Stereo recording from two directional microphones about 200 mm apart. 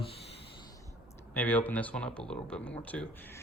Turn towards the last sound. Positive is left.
turn(degrees=5)  # may be behind; listen again after turning